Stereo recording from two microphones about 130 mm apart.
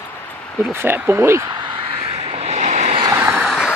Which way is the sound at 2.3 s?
55° right (ahead or behind).